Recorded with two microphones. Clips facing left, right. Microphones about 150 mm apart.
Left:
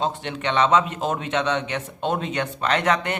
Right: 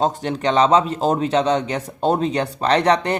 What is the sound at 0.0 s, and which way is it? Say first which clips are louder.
A man's voice: right 6 dB; 40° right (ahead or behind).